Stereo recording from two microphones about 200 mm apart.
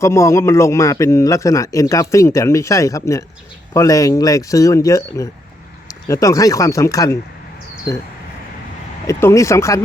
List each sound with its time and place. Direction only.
0.0 s a man's voice: 15° left (ahead or behind)
9.0 s a man's voice: 15° left (ahead or behind)